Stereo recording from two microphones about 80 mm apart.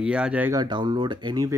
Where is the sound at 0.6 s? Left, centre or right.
Right.